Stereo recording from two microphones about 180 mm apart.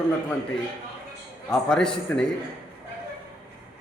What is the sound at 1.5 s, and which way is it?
Speech, 5° left (ahead or behind).